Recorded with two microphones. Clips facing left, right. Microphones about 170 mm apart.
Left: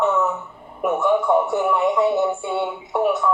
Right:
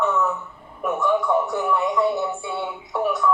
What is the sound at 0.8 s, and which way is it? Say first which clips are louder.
Speech: left 3 dB; 20° left (ahead or behind).